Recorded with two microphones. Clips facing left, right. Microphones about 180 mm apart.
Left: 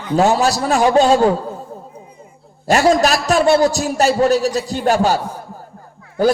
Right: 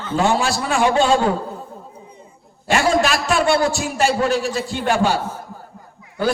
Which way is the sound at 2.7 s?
40° left (ahead or behind).